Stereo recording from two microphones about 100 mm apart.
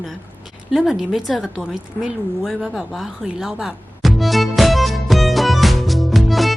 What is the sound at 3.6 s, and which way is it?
Music, centre (ahead or behind).